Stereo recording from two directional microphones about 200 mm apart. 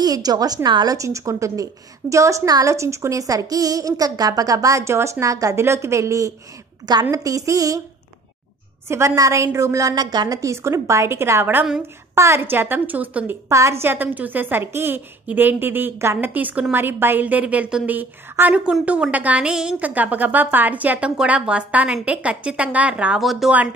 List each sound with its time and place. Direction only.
0.0 s a woman's voice: 20° right (ahead or behind)
8.8 s a woman's voice: 15° right (ahead or behind)